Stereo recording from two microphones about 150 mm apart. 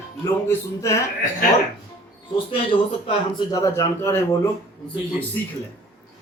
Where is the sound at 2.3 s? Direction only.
35° left (ahead or behind).